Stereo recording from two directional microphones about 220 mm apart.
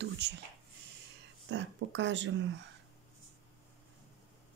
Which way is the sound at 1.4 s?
55° right (ahead or behind).